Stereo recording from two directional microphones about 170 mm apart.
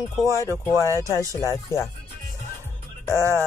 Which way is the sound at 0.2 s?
20° right (ahead or behind).